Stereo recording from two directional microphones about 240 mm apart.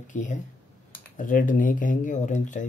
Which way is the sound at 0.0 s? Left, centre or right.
Left.